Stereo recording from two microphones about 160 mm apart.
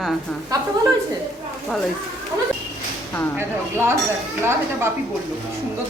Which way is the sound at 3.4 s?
15° right (ahead or behind).